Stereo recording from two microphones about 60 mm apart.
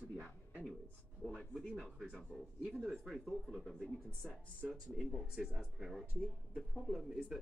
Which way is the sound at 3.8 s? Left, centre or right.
Centre.